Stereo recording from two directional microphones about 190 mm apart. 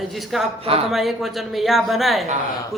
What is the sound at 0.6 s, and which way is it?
Speech, 30° right (ahead or behind).